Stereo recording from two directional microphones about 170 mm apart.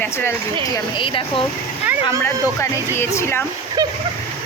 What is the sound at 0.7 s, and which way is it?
Speech, 30° left (ahead or behind).